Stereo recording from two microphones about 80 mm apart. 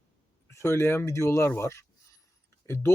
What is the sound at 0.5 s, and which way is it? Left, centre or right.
Speech, left.